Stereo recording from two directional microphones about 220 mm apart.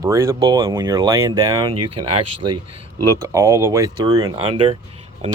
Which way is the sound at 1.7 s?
90° right.